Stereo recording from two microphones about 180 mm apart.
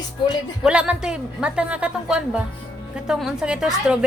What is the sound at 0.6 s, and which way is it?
A woman's voice, 5° right (ahead or behind).